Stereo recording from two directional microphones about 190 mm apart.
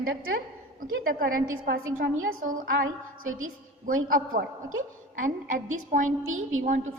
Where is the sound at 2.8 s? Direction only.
90° right.